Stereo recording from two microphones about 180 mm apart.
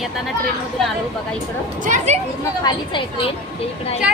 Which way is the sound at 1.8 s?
40° right (ahead or behind).